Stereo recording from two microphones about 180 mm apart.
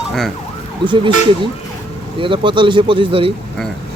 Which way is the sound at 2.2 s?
30° right (ahead or behind).